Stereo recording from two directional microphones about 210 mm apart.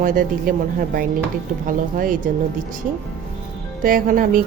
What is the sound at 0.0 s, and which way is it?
Speech, 40° right (ahead or behind).